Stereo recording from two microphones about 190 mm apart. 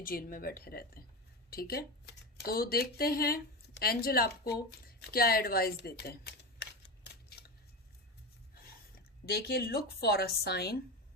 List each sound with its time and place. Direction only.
0.0 s speech: 50° left (ahead or behind)
7.0 s a sound: 55° left (ahead or behind)
9.2 s a woman's voice: 55° left (ahead or behind)